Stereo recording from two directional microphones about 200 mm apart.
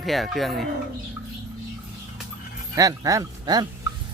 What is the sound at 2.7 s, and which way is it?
Speech, 15° right (ahead or behind).